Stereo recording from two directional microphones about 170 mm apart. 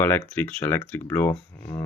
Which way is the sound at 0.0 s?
10° left (ahead or behind).